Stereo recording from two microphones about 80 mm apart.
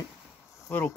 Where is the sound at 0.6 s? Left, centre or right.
Left.